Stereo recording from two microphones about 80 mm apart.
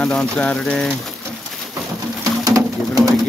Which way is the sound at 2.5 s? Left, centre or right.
Right.